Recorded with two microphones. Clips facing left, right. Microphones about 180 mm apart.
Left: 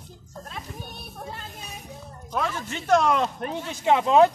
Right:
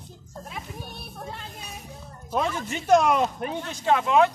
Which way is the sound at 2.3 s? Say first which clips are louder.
Right 2 dB; 15° right (ahead or behind).